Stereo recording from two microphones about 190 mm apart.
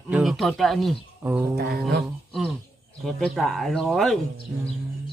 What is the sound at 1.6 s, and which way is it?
Music, 55° right (ahead or behind).